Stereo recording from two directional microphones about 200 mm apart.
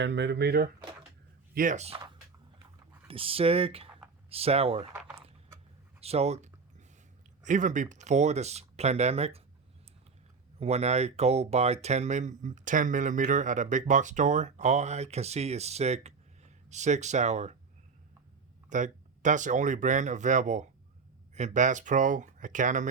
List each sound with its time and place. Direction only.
0.0 s speech: 60° right (ahead or behind)
1.5 s speech: 40° right (ahead or behind)
6.0 s a sound: 30° right (ahead or behind)
7.4 s speech: 40° right (ahead or behind)
10.6 s speech: 30° right (ahead or behind)
18.7 s speech: 40° right (ahead or behind)